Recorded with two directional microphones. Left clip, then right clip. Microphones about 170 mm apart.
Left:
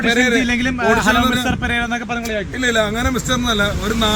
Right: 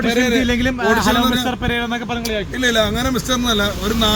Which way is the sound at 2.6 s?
10° right (ahead or behind).